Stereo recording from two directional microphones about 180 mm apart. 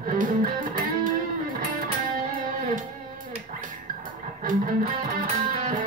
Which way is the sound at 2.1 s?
50° right (ahead or behind).